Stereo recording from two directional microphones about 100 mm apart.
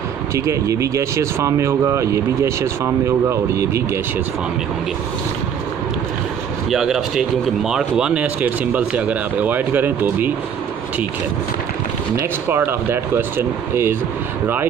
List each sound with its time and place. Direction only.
0.3 s speech: 30° right (ahead or behind)
6.7 s speech: 5° right (ahead or behind); by 10.3 s 20° right (ahead or behind)
12.4 s speech: 25° right (ahead or behind)